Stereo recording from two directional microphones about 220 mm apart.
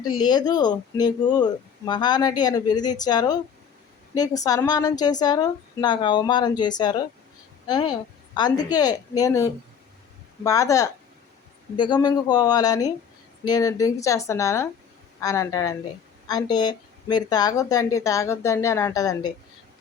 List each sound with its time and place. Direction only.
0.0 s a woman's voice: 20° left (ahead or behind)